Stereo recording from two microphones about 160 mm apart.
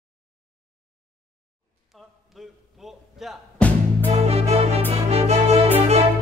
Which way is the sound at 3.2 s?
Centre (ahead or behind).